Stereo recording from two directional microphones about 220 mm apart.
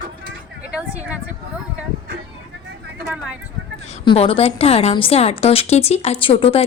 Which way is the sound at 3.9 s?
30° left (ahead or behind).